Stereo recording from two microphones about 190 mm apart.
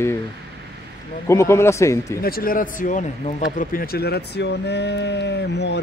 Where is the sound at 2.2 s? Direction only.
50° left (ahead or behind).